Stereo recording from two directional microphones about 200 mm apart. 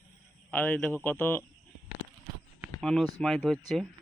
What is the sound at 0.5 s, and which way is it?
Speech, 10° left (ahead or behind).